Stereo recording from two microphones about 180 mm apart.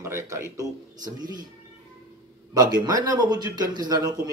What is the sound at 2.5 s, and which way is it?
Speech, 20° right (ahead or behind).